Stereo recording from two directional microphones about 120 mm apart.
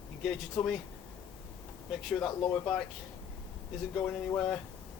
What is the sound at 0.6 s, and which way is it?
Speech, 5° left (ahead or behind).